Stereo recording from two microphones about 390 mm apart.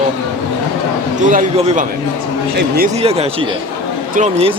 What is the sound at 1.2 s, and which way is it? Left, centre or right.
A man's voice, centre.